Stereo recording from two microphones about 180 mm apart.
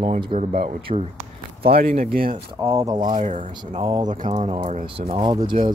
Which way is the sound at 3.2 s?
45° right (ahead or behind).